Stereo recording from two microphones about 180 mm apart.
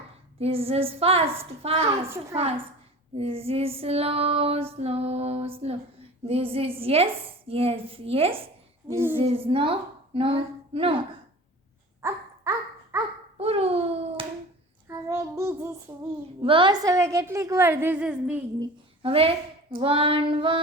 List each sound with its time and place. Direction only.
0.3 s female singing: 35° right (ahead or behind)
8.9 s a woman's voice: 15° right (ahead or behind)
9.1 s female singing: 30° right (ahead or behind)
10.2 s speech: 30° right (ahead or behind)
12.0 s dog: 15° right (ahead or behind)
13.3 s hands: 35° right (ahead or behind)
14.8 s child singing: 15° right (ahead or behind)
16.4 s a woman's voice: 30° right (ahead or behind); by 18.4 s 5° right (ahead or behind)
18.6 s speech: 30° right (ahead or behind)
19.7 s female singing: 30° right (ahead or behind)